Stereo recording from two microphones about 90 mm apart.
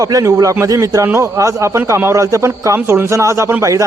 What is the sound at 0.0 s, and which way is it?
A man's voice, 40° right (ahead or behind).